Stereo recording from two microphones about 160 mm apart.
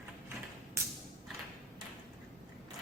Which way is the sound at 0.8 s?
15° right (ahead or behind).